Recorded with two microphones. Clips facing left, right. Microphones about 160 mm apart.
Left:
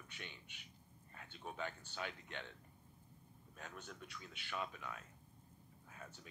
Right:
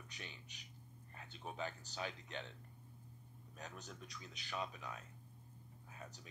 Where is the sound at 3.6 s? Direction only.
40° right (ahead or behind).